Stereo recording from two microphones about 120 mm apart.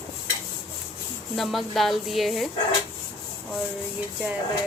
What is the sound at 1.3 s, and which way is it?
Speech, centre (ahead or behind).